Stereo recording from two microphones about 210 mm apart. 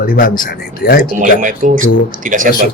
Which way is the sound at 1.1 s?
35° right (ahead or behind).